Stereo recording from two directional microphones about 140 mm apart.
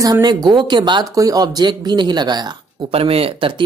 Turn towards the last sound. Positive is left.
turn(degrees=-40)  # may be behind; listen again after turning